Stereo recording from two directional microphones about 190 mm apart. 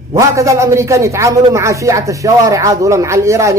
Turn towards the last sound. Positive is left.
turn(degrees=-15)  # may be behind; listen again after turning